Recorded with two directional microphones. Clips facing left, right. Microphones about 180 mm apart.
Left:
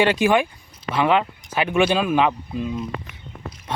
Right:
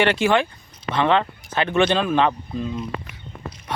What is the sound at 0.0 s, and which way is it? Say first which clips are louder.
Speech: left 1 dB; 15° left (ahead or behind).